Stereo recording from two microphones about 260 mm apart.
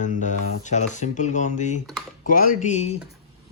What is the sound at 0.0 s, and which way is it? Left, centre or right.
Speech, left.